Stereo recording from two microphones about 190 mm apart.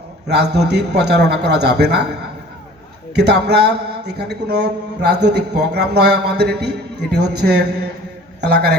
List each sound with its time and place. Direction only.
0.3 s a man's voice: 60° right (ahead or behind)
3.2 s a man's voice: 60° right (ahead or behind)